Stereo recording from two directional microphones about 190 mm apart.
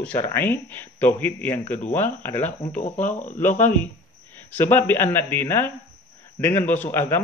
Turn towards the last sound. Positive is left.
turn(degrees=10)  # may be behind; listen again after turning